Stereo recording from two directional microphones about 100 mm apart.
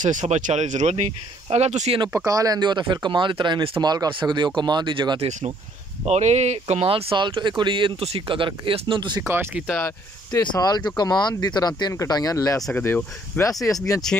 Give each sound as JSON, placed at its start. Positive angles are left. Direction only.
{"t": 0.2, "sound": "speech", "side_deg": -80}
{"t": 1.5, "sound": "speech", "side_deg": -90}
{"t": 2.1, "sound": "speech", "side_deg": -35}
{"t": 3.8, "sound": "speech", "side_deg": -45}
{"t": 6.0, "sound": "speech", "side_deg": -90}
{"t": 9.2, "sound": "speech", "side_deg": -25}
{"t": 10.3, "sound": "speech", "side_deg": 40}
{"t": 12.7, "sound": "speech", "side_deg": 20}
{"t": 13.4, "sound": "speech", "side_deg": 35}